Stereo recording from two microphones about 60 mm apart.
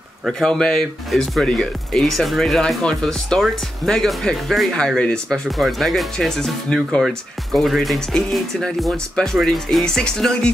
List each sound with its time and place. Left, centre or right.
0.3 s speech: centre
5.6 s speech: centre